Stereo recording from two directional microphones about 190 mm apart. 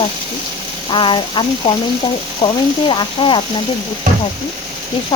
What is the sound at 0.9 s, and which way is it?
Frying, 25° left (ahead or behind).